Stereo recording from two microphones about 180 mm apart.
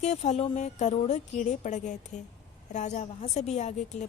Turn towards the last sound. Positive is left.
turn(degrees=40)  # may be behind; listen again after turning